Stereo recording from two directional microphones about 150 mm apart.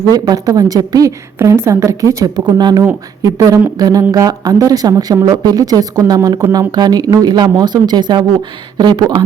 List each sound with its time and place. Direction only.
0.1 s a woman's voice: 25° right (ahead or behind)